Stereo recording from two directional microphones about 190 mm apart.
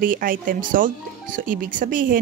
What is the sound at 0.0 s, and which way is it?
Speech, 45° right (ahead or behind).